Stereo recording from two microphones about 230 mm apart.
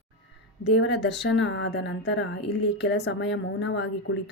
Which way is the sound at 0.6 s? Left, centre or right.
Left.